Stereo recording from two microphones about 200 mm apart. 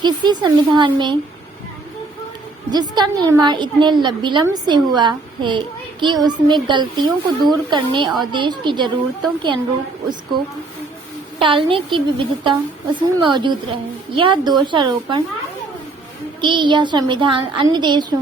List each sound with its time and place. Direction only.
0.0 s a woman's voice: 20° right (ahead or behind)
2.6 s a woman's voice: 20° right (ahead or behind)
11.3 s a woman's voice: 25° right (ahead or behind)
16.4 s a woman's voice: 25° right (ahead or behind)